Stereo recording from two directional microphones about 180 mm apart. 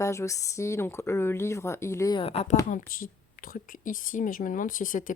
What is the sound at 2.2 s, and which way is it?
Speech, 35° left (ahead or behind).